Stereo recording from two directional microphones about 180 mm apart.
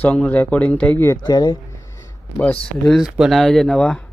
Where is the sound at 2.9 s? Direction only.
Centre (ahead or behind).